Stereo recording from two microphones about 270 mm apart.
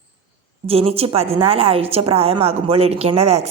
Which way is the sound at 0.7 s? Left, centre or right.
Right.